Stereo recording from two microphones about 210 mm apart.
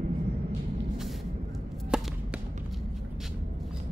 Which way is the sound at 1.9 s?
5° right (ahead or behind).